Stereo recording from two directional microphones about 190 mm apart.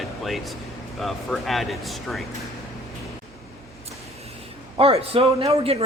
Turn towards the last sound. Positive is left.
turn(degrees=-30)  # may be behind; listen again after turning